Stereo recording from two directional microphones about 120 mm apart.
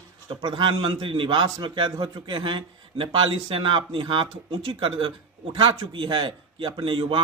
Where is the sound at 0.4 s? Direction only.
40° right (ahead or behind).